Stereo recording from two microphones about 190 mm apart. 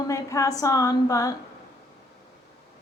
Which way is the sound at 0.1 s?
15° left (ahead or behind).